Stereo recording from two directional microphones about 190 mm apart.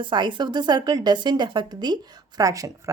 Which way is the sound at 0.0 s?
25° right (ahead or behind).